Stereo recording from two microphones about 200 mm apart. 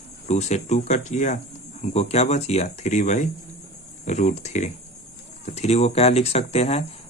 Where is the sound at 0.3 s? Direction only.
35° left (ahead or behind).